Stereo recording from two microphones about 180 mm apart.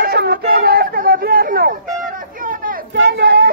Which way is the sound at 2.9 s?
65° right (ahead or behind).